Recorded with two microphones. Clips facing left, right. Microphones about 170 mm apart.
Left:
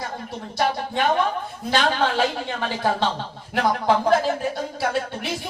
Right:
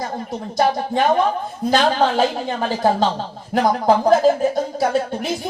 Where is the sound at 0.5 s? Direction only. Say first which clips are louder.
Right 5 dB; 40° right (ahead or behind).